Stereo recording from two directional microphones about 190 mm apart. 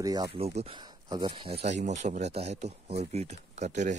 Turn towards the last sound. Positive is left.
turn(degrees=-40)  # may be behind; listen again after turning